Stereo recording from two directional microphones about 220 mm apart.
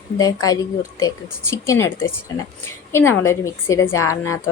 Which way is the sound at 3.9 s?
75° left (ahead or behind).